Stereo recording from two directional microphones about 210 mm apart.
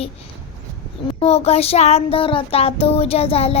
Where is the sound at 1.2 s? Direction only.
30° left (ahead or behind).